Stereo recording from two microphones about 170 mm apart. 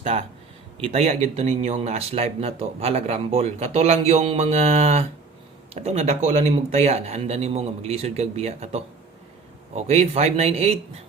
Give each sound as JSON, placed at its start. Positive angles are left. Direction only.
{"t": 0.0, "sound": "speech", "side_deg": -40}